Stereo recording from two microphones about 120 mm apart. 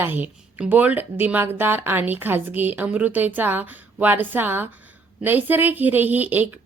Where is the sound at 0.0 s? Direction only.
15° right (ahead or behind).